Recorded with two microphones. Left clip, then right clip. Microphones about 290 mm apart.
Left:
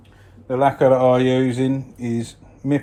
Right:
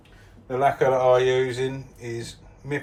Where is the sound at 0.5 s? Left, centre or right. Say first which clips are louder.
Left 5 dB; left.